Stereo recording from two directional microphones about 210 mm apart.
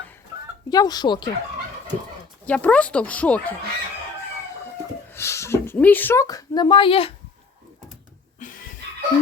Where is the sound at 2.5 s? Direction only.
5° left (ahead or behind).